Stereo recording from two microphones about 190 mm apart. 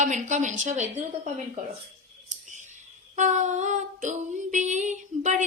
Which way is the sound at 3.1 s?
40° right (ahead or behind).